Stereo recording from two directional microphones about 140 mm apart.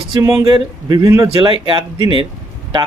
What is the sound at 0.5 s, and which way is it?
Speech, 25° right (ahead or behind).